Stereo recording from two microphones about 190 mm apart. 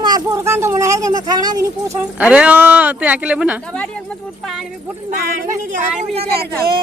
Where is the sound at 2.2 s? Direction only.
5° right (ahead or behind).